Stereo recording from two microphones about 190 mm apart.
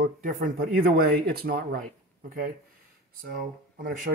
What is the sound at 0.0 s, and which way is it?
Speech, 45° right (ahead or behind).